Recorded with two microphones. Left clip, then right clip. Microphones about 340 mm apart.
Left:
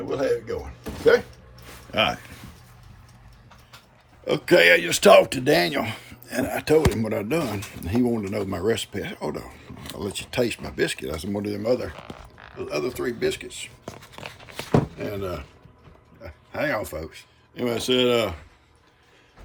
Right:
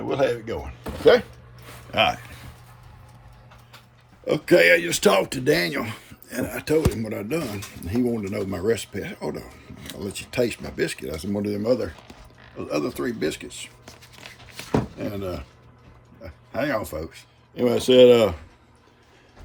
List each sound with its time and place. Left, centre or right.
0.1 s speech: centre
4.3 s speech: centre
13.8 s a sound: centre
14.9 s speech: centre